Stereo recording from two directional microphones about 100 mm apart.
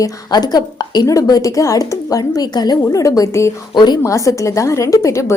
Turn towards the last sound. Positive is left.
turn(degrees=30)  # may be behind; listen again after turning